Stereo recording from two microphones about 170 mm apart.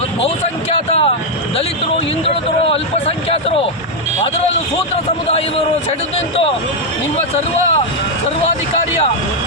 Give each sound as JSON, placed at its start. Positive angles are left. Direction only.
{"t": 0.7, "sound": "a man's voice", "side_deg": 35}
{"t": 2.2, "sound": "a man's voice", "side_deg": 35}